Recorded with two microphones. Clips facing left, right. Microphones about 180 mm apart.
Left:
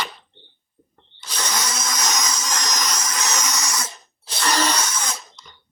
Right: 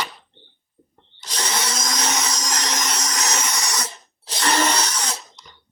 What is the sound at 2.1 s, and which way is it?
Wood, 35° right (ahead or behind).